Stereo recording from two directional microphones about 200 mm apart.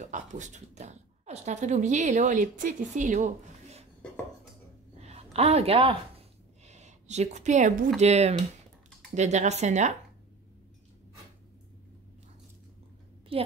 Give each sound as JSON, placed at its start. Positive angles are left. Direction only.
{"t": 0.0, "sound": "speech", "side_deg": -40}
{"t": 5.0, "sound": "a sound", "side_deg": -30}
{"t": 6.6, "sound": "speech", "side_deg": -35}
{"t": 13.3, "sound": "a woman's voice", "side_deg": -25}